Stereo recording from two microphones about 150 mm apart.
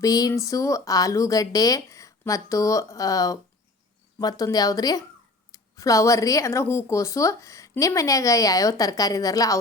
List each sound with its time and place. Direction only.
0.0 s speech: 25° left (ahead or behind)